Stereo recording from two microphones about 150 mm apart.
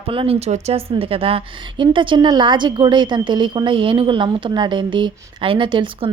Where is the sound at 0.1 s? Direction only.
40° right (ahead or behind).